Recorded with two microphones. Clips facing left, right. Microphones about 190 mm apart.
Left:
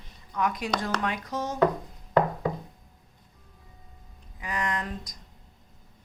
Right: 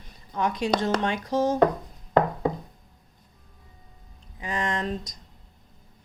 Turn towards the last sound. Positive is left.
turn(degrees=-25)  # may be behind; listen again after turning